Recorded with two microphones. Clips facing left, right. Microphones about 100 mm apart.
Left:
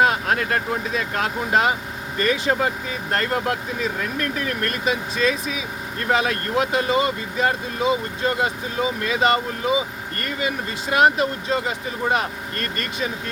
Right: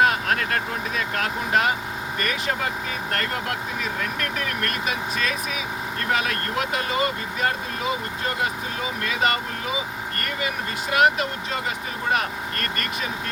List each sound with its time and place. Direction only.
0.0 s speech: 20° left (ahead or behind)
6.1 s speech: 25° left (ahead or behind)
10.8 s speech: 30° left (ahead or behind)